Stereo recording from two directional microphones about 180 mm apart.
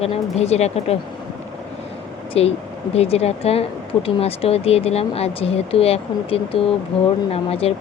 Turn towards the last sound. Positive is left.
turn(degrees=35)  # may be behind; listen again after turning